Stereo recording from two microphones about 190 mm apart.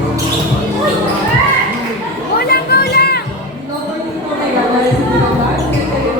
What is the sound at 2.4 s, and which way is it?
Music, 55° left (ahead or behind).